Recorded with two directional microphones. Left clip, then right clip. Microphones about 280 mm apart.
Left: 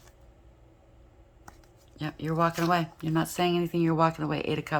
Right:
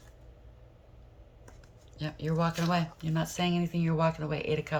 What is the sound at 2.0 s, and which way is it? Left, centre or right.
Speech, centre.